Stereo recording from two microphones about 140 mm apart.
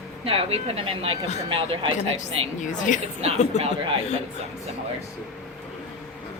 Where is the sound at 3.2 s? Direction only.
45° right (ahead or behind).